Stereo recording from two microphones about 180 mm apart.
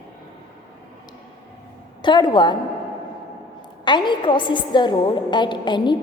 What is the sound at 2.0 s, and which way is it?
Speech, 25° left (ahead or behind).